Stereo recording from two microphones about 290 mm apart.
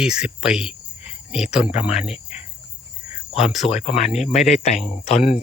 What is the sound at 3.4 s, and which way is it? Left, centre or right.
Speech, left.